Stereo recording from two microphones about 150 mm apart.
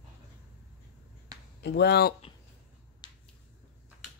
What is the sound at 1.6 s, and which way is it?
Speech, 90° left.